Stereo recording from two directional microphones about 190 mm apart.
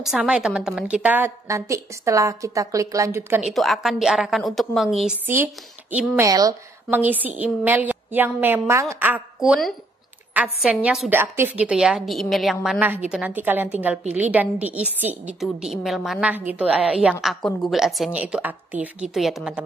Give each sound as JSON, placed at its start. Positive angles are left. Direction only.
{"t": 0.0, "sound": "a woman's voice", "side_deg": -5}
{"t": 6.2, "sound": "a woman's voice", "side_deg": -20}